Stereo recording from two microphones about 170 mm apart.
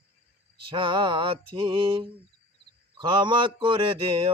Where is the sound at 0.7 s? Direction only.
30° right (ahead or behind).